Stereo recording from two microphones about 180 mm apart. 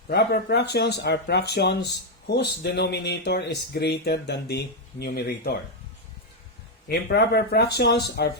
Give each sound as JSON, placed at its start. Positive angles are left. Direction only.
{"t": 0.1, "sound": "speech", "side_deg": 65}
{"t": 6.8, "sound": "speech", "side_deg": 65}